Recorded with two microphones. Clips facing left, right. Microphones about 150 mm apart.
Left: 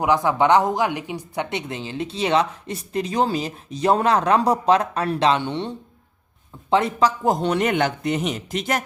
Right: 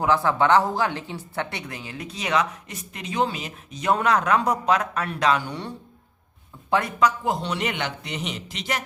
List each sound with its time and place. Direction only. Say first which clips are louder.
0.0 s speech: left 2 dB; 15° left (ahead or behind)
7.3 s speech: left 6 dB; 45° left (ahead or behind)